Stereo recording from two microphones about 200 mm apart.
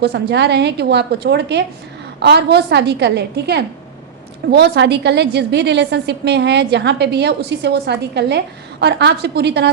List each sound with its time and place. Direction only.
0.0 s a woman's voice: 55° right (ahead or behind)